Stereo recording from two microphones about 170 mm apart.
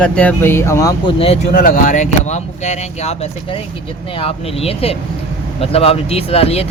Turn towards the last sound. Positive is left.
turn(degrees=35)  # may be behind; listen again after turning